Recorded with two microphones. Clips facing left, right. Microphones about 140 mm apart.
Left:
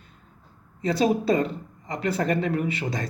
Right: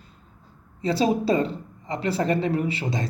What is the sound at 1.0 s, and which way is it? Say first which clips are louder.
Speech: even; 25° right (ahead or behind).